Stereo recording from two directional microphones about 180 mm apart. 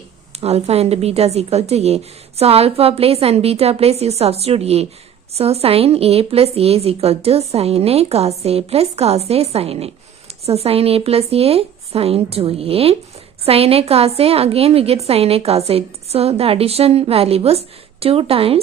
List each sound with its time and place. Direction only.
0.3 s a woman's voice: 35° right (ahead or behind)